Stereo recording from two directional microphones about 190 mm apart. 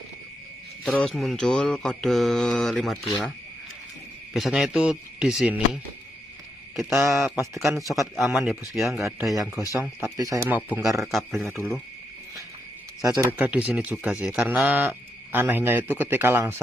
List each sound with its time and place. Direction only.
0.9 s speech: centre (ahead or behind)
4.4 s speech: centre (ahead or behind)
6.9 s speech: 15° right (ahead or behind)
7.8 s speech: centre (ahead or behind)
8.3 s speech: 10° right (ahead or behind)
8.7 s speech: centre (ahead or behind); by 11.0 s 15° right (ahead or behind)
11.0 s speech: centre (ahead or behind)
11.4 s speech: 15° right (ahead or behind)
13.0 s speech: 15° right (ahead or behind)